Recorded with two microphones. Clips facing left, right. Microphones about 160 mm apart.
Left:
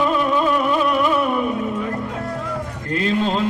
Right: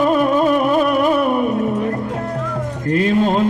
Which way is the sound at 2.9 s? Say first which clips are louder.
Right 4 dB; 50° right (ahead or behind).